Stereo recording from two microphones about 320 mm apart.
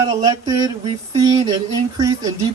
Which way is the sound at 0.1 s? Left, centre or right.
Centre.